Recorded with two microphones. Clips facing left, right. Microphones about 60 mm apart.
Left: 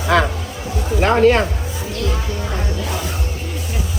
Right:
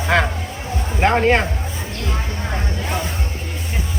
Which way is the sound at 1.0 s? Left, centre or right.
Right.